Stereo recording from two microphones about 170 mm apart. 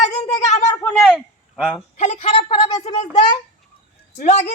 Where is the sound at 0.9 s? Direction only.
5° left (ahead or behind).